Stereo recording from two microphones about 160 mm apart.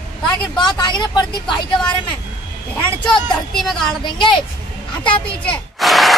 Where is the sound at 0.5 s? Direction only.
25° left (ahead or behind).